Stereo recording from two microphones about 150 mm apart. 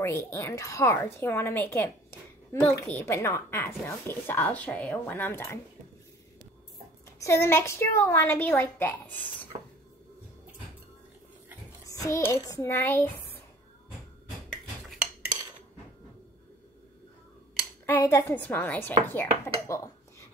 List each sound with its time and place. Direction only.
0.3 s a woman's voice: 20° left (ahead or behind)
7.2 s a woman's voice: 20° left (ahead or behind)
11.8 s speech: 20° left (ahead or behind)
17.8 s a woman's voice: 15° left (ahead or behind)